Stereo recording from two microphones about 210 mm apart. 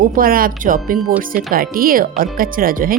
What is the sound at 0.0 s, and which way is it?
A woman's voice, 45° right (ahead or behind).